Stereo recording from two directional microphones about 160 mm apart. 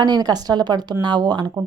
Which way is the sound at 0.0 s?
25° right (ahead or behind).